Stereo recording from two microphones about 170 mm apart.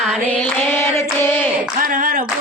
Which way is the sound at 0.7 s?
15° left (ahead or behind).